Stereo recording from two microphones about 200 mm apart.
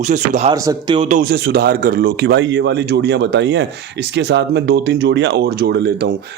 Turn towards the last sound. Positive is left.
turn(degrees=-55)  # may be behind; listen again after turning